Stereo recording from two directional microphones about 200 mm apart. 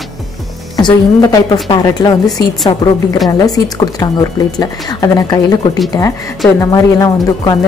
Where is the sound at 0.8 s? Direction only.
20° left (ahead or behind).